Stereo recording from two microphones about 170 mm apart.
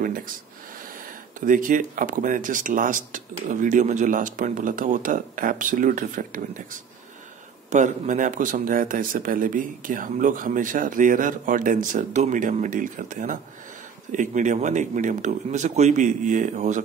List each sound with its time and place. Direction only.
1.4 s speech: 55° right (ahead or behind)